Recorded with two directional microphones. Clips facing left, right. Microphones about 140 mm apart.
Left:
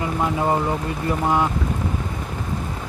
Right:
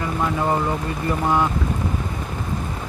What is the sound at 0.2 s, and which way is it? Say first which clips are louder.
Speech: even; 15° left (ahead or behind).